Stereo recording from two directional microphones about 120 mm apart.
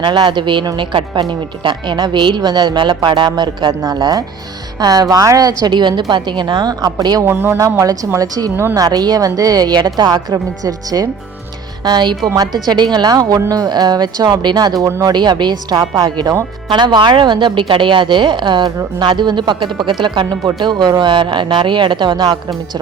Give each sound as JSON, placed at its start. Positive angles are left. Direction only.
{"t": 0.0, "sound": "speech", "side_deg": -40}
{"t": 7.3, "sound": "a woman's voice", "side_deg": -20}
{"t": 15.1, "sound": "speech", "side_deg": -40}